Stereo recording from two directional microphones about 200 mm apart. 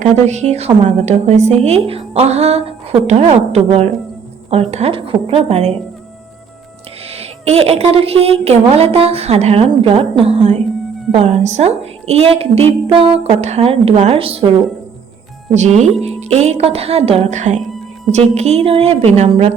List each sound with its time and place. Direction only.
0.0 s a woman's voice: 35° right (ahead or behind)
7.1 s speech: 30° right (ahead or behind)
15.5 s a woman's voice: 35° right (ahead or behind)